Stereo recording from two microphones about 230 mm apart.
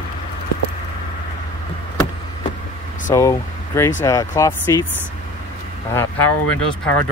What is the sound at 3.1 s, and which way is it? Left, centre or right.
Speech, centre.